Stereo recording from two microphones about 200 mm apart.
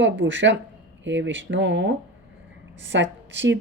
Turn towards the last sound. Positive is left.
turn(degrees=-65)  # may be behind; listen again after turning